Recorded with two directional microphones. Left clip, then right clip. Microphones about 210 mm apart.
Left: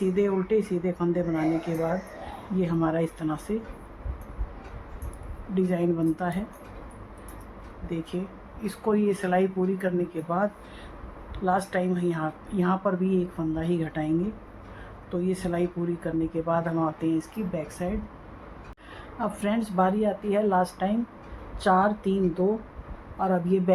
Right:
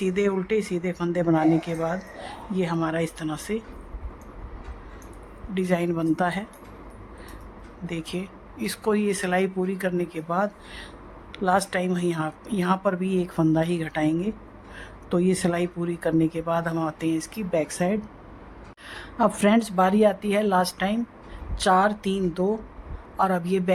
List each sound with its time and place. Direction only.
0.0 s speech: 50° right (ahead or behind)
5.5 s speech: 50° right (ahead or behind)
7.9 s speech: 55° right (ahead or behind)
15.1 s speech: 55° right (ahead or behind)